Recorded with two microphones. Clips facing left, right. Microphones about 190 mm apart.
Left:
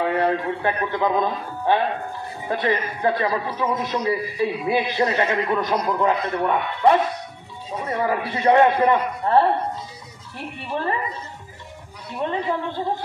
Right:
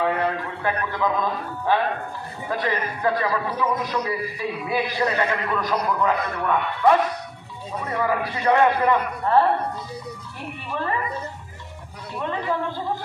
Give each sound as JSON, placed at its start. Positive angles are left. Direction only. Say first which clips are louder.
{"t": 0.2, "sound": "a man's voice", "louder": "left 4 dB", "side_deg": 30}
{"t": 2.5, "sound": "a man's voice", "louder": "left 3 dB", "side_deg": 25}
{"t": 10.7, "sound": "speech", "louder": "left 2 dB", "side_deg": 30}
{"t": 12.2, "sound": "a man's voice", "louder": "left 2 dB", "side_deg": 30}